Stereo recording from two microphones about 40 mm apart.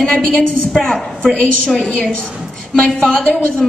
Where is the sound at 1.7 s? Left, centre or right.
Left.